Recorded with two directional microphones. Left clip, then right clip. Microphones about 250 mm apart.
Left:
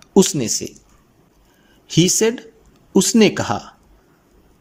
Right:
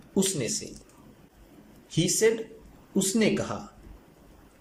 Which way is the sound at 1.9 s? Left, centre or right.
Left.